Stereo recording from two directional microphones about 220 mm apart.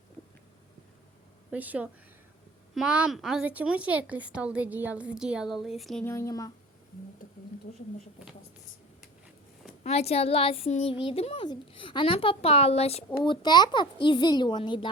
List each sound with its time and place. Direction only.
1.5 s a woman's voice: 5° right (ahead or behind); by 6.5 s 15° left (ahead or behind)
9.8 s speech: 30° left (ahead or behind)